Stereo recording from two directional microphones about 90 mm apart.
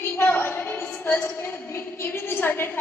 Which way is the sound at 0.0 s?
25° left (ahead or behind).